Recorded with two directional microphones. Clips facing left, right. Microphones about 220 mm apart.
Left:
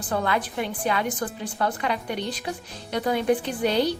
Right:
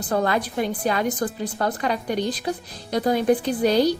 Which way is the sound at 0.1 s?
40° right (ahead or behind).